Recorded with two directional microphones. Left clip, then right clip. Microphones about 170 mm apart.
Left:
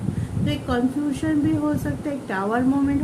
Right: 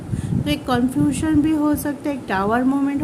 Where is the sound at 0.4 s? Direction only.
60° right (ahead or behind).